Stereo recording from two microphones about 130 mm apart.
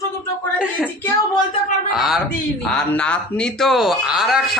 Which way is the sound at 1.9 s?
Centre (ahead or behind).